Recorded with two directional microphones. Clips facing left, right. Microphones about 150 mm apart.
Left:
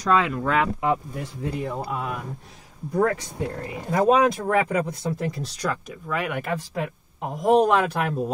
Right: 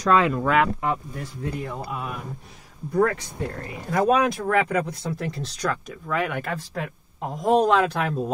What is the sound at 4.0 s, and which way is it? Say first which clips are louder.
Speech: left 2 dB; 20° left (ahead or behind).